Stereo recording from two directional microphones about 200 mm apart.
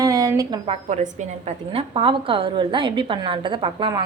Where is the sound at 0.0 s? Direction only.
15° right (ahead or behind).